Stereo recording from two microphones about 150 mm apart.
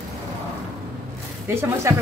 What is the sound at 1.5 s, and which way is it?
Speech, 15° right (ahead or behind).